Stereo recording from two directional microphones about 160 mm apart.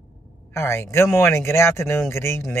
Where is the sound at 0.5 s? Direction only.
15° left (ahead or behind).